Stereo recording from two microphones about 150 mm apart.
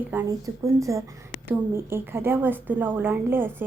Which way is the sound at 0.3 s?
20° right (ahead or behind).